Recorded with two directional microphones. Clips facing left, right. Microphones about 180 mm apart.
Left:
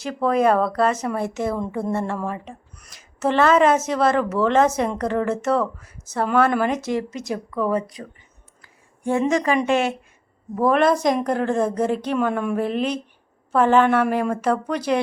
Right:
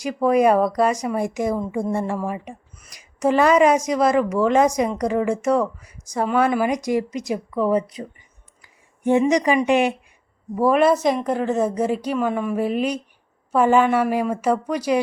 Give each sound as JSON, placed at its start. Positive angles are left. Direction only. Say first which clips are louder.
{"t": 0.0, "sound": "a woman's voice", "louder": "right 2 dB", "side_deg": -10}